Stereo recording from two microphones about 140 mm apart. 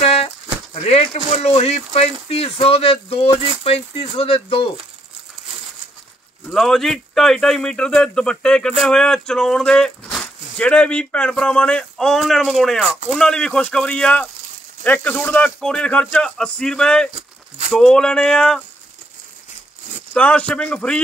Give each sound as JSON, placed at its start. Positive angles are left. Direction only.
{"t": 0.0, "sound": "a sound", "side_deg": 45}
{"t": 0.8, "sound": "speech", "side_deg": 50}
{"t": 6.5, "sound": "speech", "side_deg": 0}
{"t": 17.1, "sound": "a sound", "side_deg": -55}
{"t": 17.7, "sound": "speech", "side_deg": 5}
{"t": 20.2, "sound": "speech", "side_deg": 10}